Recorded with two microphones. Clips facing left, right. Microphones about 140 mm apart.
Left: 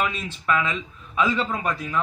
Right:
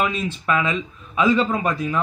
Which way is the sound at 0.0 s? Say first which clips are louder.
Right 4 dB; 20° right (ahead or behind).